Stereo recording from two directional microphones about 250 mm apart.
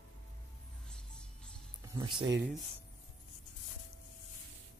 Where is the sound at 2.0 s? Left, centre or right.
Centre.